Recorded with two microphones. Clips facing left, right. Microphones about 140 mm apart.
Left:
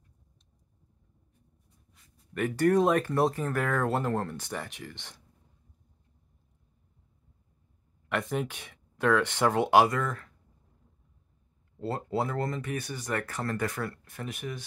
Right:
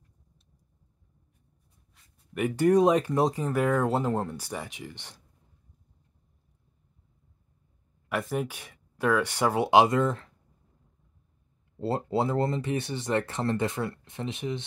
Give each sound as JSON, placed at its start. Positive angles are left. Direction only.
{"t": 2.3, "sound": "speech", "side_deg": -15}
{"t": 8.1, "sound": "speech", "side_deg": -5}
{"t": 11.8, "sound": "speech", "side_deg": -30}